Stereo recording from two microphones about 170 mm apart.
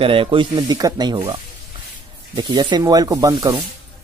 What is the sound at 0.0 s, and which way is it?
Speech, 30° right (ahead or behind).